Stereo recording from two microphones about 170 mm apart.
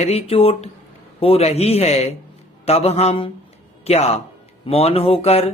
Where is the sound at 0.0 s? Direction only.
35° left (ahead or behind).